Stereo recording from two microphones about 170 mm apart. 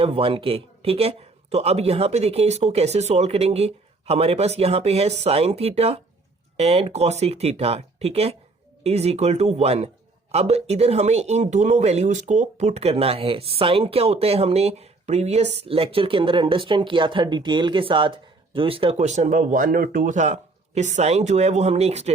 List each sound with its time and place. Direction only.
0.0 s speech: 35° right (ahead or behind)